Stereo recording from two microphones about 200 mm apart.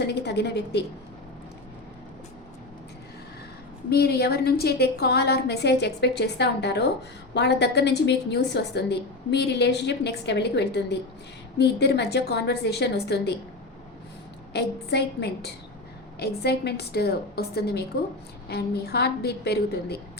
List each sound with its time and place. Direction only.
0.1 s a woman's voice: 55° left (ahead or behind)
3.8 s a woman's voice: 55° left (ahead or behind)
14.5 s a woman's voice: 55° left (ahead or behind)